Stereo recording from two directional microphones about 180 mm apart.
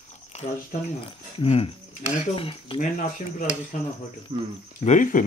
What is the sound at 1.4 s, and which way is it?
Speech, 35° left (ahead or behind).